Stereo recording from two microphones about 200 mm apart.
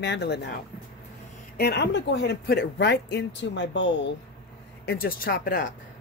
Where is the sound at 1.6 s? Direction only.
55° left (ahead or behind).